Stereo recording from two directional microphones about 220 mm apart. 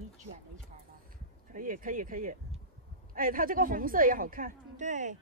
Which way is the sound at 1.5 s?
40° right (ahead or behind).